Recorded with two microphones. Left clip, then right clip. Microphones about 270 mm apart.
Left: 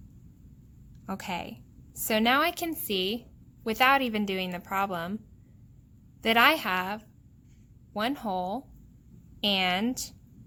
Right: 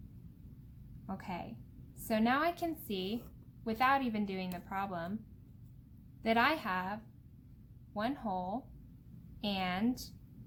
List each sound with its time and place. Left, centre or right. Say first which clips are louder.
1.0 s a woman's voice: left 8 dB; left
6.2 s a woman's voice: left 9 dB; left